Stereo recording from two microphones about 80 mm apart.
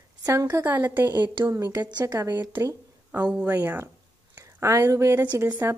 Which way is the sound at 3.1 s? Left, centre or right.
Centre.